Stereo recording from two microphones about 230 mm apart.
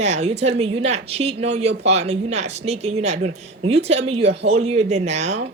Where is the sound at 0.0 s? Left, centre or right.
Right.